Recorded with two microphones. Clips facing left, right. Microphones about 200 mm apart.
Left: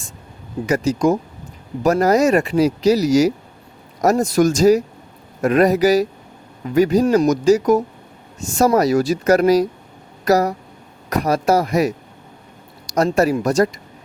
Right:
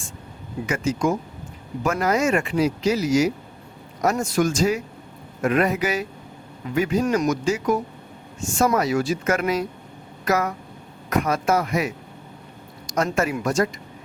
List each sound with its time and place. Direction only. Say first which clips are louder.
0.7 s speech: left 6 dB; 40° left (ahead or behind)